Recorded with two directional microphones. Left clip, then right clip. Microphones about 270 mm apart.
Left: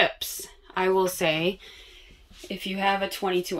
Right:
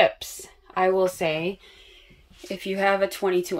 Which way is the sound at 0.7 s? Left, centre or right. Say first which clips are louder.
Right 2 dB; centre.